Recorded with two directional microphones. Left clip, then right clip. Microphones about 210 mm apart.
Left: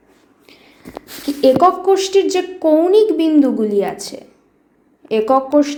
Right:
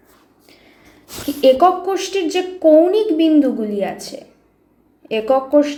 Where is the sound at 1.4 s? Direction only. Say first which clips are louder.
Left 1 dB; 20° left (ahead or behind).